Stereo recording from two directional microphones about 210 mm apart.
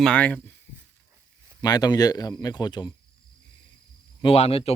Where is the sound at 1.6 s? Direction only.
20° left (ahead or behind).